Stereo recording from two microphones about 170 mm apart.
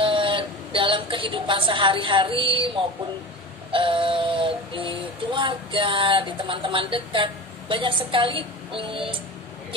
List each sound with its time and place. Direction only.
0.0 s a woman's voice: 30° right (ahead or behind)
3.7 s synthetic singing: 30° right (ahead or behind)